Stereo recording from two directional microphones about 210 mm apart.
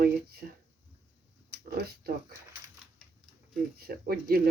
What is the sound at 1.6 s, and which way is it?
Speech, 45° right (ahead or behind).